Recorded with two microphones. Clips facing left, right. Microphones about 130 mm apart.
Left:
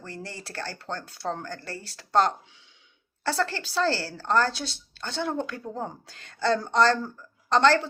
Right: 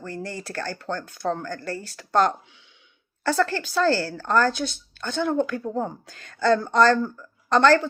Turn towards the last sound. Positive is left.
turn(degrees=25)  # may be behind; listen again after turning